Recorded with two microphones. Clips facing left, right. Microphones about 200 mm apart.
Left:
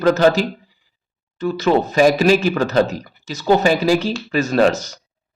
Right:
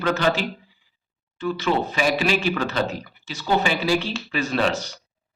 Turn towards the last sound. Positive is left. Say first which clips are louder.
# left 7 dB
turn(degrees=45)  # may be behind; listen again after turning